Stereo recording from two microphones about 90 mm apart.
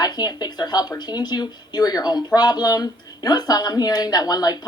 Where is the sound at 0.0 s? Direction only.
50° left (ahead or behind).